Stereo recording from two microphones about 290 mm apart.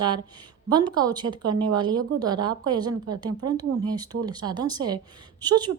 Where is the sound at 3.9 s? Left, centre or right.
Centre.